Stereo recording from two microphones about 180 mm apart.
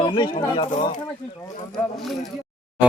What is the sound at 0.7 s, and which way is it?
Speech, 45° left (ahead or behind).